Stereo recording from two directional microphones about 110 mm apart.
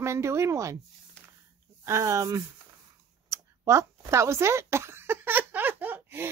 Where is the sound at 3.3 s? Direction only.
30° right (ahead or behind).